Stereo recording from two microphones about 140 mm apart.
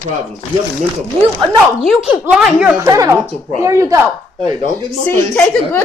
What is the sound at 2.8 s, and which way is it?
Speech, 25° right (ahead or behind).